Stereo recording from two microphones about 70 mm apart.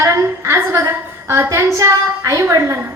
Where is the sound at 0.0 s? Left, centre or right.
Right.